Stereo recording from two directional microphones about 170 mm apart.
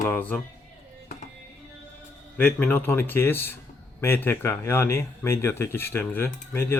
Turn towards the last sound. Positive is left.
turn(degrees=15)  # may be behind; listen again after turning